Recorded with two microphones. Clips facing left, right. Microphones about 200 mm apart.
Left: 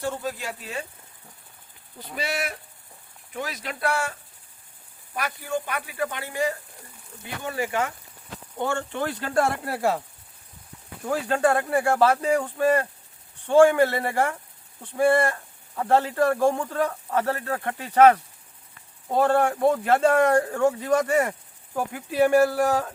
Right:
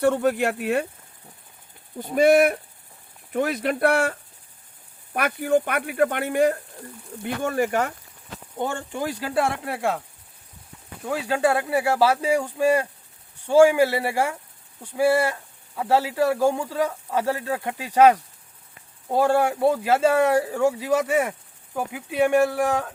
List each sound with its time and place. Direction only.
0.0 s speech: 65° right (ahead or behind)
2.0 s speech: 50° right (ahead or behind)
5.1 s speech: 60° right (ahead or behind)
7.4 s speech: 45° right (ahead or behind)
8.5 s speech: 15° right (ahead or behind); by 10.0 s centre (ahead or behind)
11.0 s speech: 5° right (ahead or behind)